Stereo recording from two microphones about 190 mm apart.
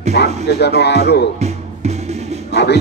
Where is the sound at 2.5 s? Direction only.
60° left (ahead or behind).